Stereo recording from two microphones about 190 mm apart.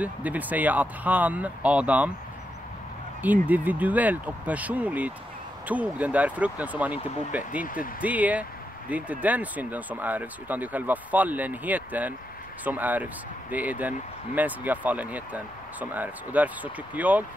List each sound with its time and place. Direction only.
0.0 s speech: 10° right (ahead or behind)
3.2 s speech: 10° right (ahead or behind)
7.6 s speech: 45° left (ahead or behind)
8.0 s speech: 10° right (ahead or behind)